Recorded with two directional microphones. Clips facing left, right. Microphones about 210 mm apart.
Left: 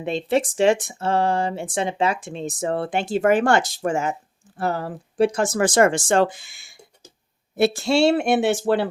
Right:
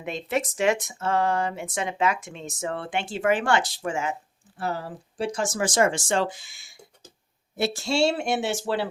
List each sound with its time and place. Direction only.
0.0 s speech: 30° left (ahead or behind)
4.5 s speech: 55° left (ahead or behind)